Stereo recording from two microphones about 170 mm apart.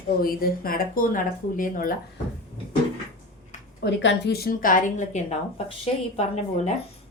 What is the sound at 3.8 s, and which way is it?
Speech, 85° left.